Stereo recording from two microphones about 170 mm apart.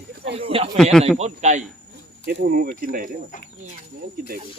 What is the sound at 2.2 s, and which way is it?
Speech, 60° right (ahead or behind).